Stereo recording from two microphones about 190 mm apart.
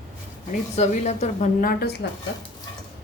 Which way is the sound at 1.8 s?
60° left (ahead or behind).